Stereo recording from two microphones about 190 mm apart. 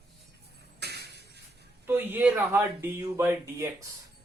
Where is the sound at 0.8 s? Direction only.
60° right (ahead or behind).